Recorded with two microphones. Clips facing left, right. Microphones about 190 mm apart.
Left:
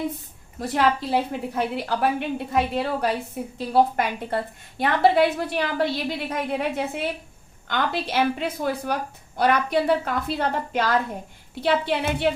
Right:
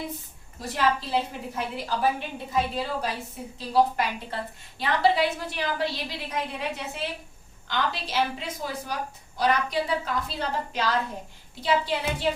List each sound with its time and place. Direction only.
0.6 s a woman's voice: 55° left (ahead or behind)